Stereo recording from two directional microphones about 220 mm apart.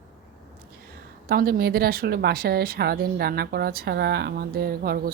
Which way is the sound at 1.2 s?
45° right (ahead or behind).